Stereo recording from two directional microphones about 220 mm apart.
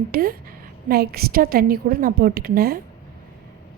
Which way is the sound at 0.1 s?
40° right (ahead or behind).